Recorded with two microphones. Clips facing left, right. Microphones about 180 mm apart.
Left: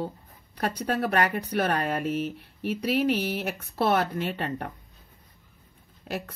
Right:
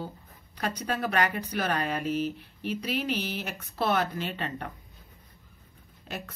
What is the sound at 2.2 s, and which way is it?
Speech, centre (ahead or behind).